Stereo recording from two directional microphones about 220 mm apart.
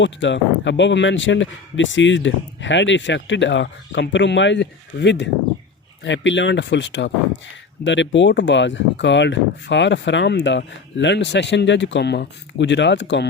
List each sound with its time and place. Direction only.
0.0 s speech: 55° left (ahead or behind)